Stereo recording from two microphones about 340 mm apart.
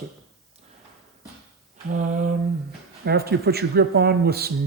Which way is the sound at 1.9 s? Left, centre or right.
Right.